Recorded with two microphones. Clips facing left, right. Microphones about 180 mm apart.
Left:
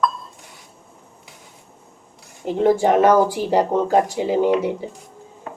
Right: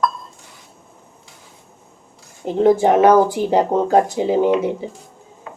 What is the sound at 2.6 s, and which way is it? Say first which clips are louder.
A woman's voice: right 2 dB; 20° right (ahead or behind).